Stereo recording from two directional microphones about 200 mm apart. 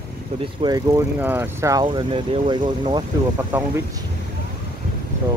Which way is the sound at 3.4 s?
10° right (ahead or behind).